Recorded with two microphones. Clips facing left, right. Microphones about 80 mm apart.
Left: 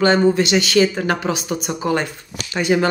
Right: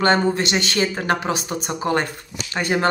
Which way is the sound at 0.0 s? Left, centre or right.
Right.